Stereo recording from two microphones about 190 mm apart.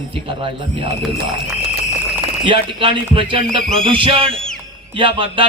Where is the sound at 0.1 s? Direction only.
25° right (ahead or behind).